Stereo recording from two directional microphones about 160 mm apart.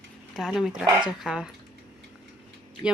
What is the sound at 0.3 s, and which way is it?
Speech, centre (ahead or behind).